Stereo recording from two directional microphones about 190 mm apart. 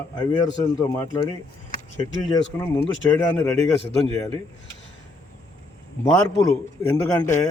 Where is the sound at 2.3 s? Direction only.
20° left (ahead or behind).